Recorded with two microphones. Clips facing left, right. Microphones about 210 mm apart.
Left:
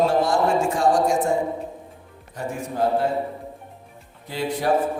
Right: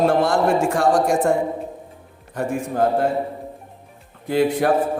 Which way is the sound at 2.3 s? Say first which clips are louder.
Right 5 dB; 55° right (ahead or behind).